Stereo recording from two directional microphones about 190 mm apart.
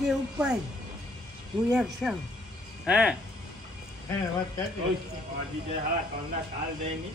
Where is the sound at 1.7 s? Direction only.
5° right (ahead or behind).